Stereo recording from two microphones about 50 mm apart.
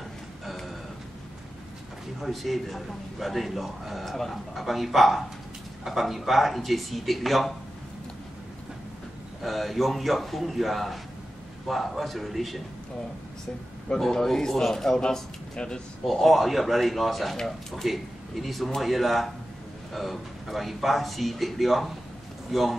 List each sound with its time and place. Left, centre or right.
2.1 s speech: centre
9.4 s speech: centre
13.9 s a man's voice: centre
16.1 s a man's voice: centre